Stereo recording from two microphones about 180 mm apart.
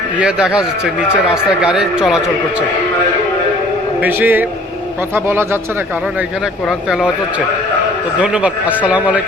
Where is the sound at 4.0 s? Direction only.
10° right (ahead or behind).